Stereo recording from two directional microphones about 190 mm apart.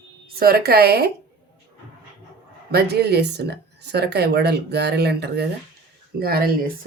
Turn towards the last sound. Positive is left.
turn(degrees=-50)  # may be behind; listen again after turning